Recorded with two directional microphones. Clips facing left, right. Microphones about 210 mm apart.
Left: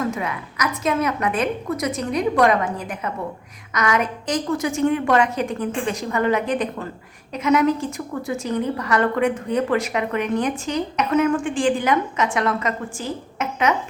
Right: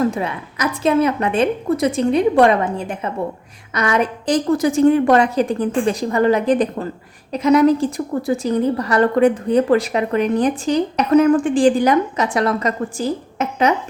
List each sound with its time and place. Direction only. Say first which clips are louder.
0.0 s a woman's voice: right 5 dB; 30° right (ahead or behind)